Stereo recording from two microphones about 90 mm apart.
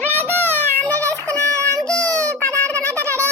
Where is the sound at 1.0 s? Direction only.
35° right (ahead or behind).